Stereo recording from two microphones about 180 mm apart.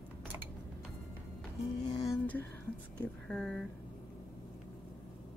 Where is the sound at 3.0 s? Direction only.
5° left (ahead or behind).